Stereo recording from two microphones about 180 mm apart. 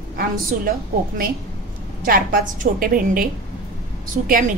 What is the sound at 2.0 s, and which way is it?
A woman's voice, 55° right (ahead or behind).